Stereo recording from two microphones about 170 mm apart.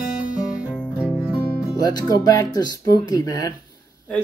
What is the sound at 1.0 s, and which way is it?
Music, 5° right (ahead or behind).